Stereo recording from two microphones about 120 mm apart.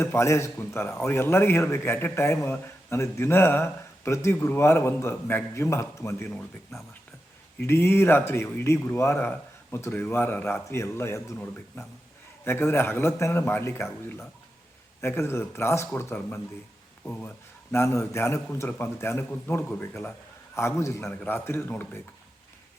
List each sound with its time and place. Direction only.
0.0 s a man's voice: 20° left (ahead or behind)
6.3 s speech: centre (ahead or behind)
7.6 s a man's voice: 20° left (ahead or behind)